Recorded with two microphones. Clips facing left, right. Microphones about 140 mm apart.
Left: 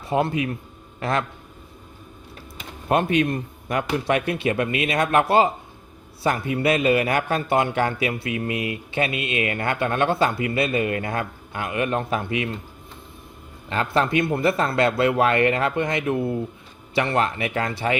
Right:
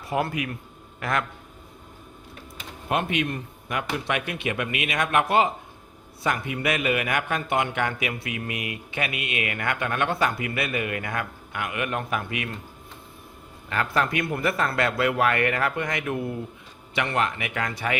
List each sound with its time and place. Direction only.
0.0 s a man's voice: 25° left (ahead or behind)
2.9 s a man's voice: 35° left (ahead or behind)
13.7 s a man's voice: 25° left (ahead or behind)